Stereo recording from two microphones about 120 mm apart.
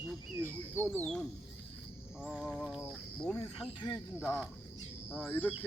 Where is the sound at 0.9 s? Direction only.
10° left (ahead or behind).